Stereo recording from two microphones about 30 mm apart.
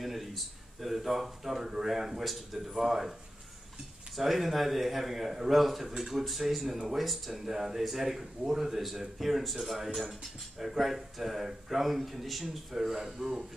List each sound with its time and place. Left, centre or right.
0.0 s speech: centre
4.2 s speech: centre
6.6 s speech: centre
7.0 s speech: centre